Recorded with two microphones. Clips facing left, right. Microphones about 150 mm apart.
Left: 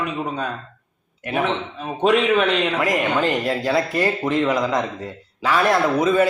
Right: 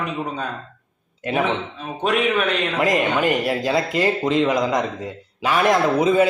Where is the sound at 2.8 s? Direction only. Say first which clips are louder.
Right 1 dB; 20° right (ahead or behind).